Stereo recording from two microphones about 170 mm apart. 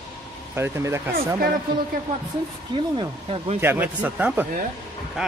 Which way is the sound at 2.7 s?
30° right (ahead or behind).